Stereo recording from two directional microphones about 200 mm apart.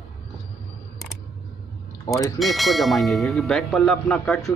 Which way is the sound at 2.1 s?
15° left (ahead or behind).